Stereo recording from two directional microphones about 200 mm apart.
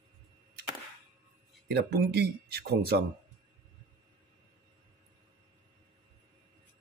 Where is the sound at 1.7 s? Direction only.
50° right (ahead or behind).